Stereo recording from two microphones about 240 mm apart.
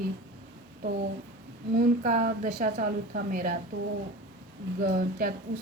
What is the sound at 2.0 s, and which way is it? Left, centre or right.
A woman's voice, right.